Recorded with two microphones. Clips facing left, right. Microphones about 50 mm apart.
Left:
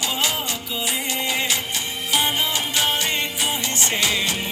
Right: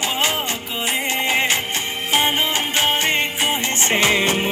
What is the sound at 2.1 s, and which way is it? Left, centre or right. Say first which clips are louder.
Music: right 3 dB; right.